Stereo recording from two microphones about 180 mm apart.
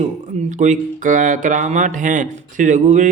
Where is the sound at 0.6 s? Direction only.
45° right (ahead or behind).